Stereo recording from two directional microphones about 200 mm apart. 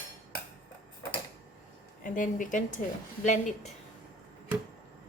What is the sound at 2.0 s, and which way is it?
Speech, 40° left (ahead or behind).